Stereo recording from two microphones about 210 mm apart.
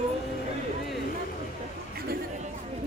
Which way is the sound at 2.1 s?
45° right (ahead or behind).